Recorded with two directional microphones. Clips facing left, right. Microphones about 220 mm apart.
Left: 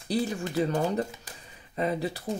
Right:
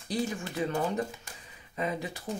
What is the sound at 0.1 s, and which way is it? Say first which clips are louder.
Speech: left 4 dB; 35° left (ahead or behind).